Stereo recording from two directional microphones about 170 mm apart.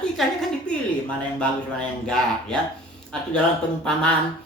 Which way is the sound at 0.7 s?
5° left (ahead or behind).